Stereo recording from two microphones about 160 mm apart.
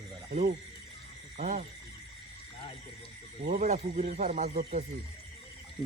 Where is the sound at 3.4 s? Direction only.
50° right (ahead or behind).